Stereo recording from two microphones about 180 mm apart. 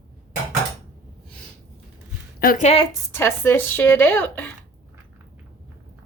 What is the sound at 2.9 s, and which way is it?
Speech, 15° left (ahead or behind).